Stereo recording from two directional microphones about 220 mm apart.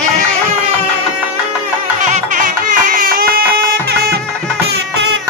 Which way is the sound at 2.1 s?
35° right (ahead or behind).